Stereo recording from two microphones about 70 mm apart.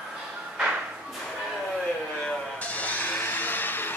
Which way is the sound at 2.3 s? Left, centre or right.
Left.